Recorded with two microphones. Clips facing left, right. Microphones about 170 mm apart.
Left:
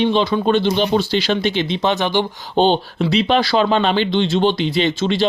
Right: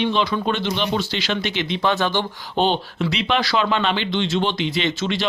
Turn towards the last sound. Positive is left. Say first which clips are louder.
# left 5 dB
turn(degrees=30)  # may be behind; listen again after turning